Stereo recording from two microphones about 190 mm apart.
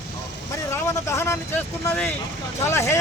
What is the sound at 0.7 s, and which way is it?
Speech, 15° left (ahead or behind).